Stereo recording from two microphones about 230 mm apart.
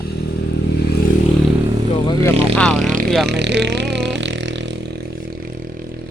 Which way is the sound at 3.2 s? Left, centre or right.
Right.